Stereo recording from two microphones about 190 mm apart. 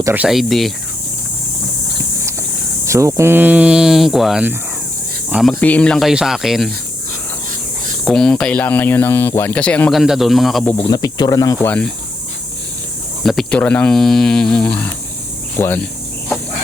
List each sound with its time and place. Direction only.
0.0 s speech: 10° right (ahead or behind)
2.8 s speech: 15° right (ahead or behind)
8.0 s speech: centre (ahead or behind)
10.8 s speech: 20° left (ahead or behind)
11.6 s speech: 5° left (ahead or behind)
13.2 s speech: 5° left (ahead or behind)
15.5 s cricket: 10° left (ahead or behind)